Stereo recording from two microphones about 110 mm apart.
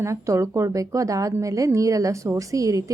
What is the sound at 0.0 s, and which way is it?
A woman's voice, 25° right (ahead or behind).